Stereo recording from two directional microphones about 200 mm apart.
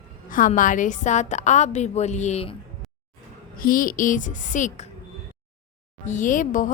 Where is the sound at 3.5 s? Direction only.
45° left (ahead or behind).